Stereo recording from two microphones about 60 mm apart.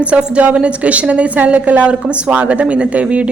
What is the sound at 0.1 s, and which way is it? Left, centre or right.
A woman's voice, right.